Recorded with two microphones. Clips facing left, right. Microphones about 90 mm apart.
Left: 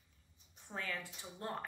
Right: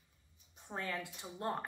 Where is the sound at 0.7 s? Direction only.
20° right (ahead or behind).